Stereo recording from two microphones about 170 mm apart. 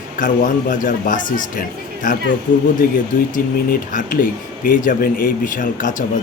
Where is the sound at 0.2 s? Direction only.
50° left (ahead or behind).